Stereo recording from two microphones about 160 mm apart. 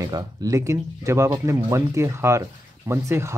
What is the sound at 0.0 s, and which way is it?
Speech, 25° right (ahead or behind).